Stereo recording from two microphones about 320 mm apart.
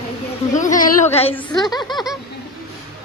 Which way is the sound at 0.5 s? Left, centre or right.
Left.